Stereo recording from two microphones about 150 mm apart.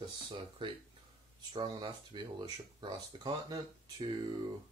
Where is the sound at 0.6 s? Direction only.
35° right (ahead or behind).